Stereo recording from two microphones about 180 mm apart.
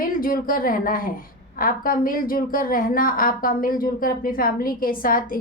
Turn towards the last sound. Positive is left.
turn(degrees=50)  # may be behind; listen again after turning